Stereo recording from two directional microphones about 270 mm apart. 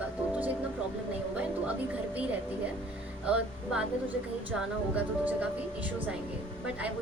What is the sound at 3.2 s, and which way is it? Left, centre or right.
Speech, centre.